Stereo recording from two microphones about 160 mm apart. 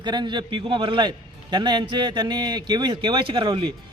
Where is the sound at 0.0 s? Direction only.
25° right (ahead or behind).